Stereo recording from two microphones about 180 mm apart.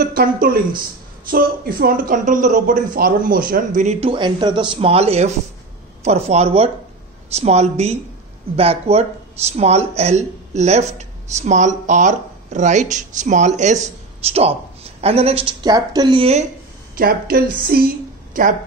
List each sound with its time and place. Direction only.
0.0 s speech: 55° right (ahead or behind); by 16.4 s 35° right (ahead or behind)
16.9 s a woman's voice: 55° right (ahead or behind)